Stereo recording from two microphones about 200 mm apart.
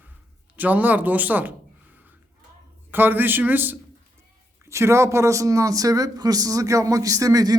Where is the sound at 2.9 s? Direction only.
10° right (ahead or behind).